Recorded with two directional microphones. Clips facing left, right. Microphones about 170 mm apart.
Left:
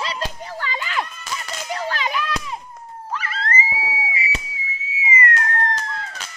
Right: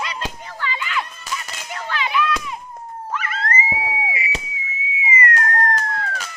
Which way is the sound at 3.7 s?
25° right (ahead or behind).